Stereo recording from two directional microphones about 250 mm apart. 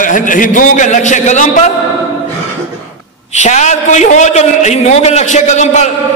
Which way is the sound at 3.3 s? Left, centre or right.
Left.